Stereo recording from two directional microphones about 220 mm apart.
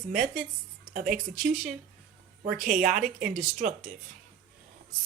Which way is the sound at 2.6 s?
40° right (ahead or behind).